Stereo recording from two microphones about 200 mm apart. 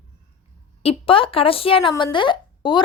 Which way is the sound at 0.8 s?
30° left (ahead or behind).